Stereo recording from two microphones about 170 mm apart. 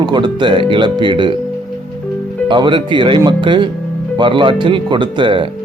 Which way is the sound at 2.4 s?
30° right (ahead or behind).